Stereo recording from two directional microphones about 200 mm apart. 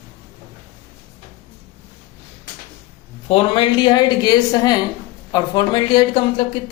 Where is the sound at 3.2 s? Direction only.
25° left (ahead or behind).